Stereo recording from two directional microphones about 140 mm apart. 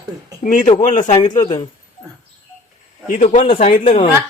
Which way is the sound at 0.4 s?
65° left (ahead or behind).